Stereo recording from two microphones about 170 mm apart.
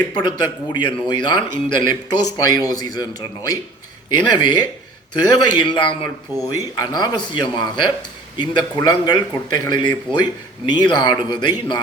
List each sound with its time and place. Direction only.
0.1 s a man's voice: 25° left (ahead or behind)